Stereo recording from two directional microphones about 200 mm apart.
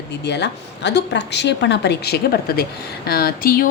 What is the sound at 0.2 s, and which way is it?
A woman's voice, 55° left (ahead or behind).